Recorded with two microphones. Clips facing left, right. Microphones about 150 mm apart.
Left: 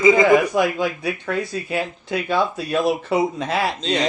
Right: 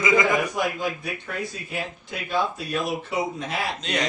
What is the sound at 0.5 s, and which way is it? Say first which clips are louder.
Speech: left 6 dB; 85° left.